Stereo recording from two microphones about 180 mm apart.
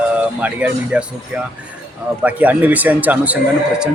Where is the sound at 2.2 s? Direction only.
10° right (ahead or behind).